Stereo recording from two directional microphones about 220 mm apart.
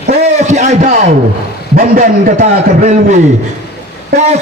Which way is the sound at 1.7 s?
40° right (ahead or behind).